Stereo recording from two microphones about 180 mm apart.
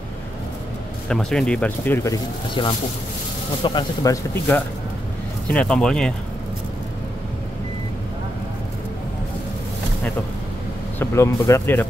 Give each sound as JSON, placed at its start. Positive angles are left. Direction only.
{"t": 1.0, "sound": "speech", "side_deg": 5}
{"t": 5.5, "sound": "speech", "side_deg": 5}
{"t": 11.0, "sound": "speech", "side_deg": 15}